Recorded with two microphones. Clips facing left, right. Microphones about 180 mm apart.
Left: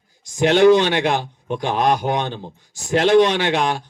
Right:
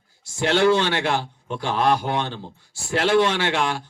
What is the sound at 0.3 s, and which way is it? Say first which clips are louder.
A man's voice: left 6 dB; 15° left (ahead or behind).